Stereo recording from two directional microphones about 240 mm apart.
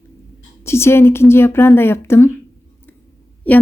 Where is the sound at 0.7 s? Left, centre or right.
Centre.